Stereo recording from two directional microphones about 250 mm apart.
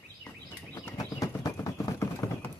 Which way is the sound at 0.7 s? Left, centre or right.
Centre.